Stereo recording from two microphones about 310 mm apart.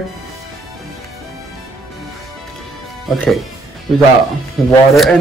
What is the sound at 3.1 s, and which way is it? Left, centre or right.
Speech, centre.